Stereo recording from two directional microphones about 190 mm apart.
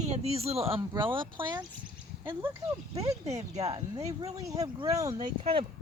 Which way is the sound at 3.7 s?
25° right (ahead or behind).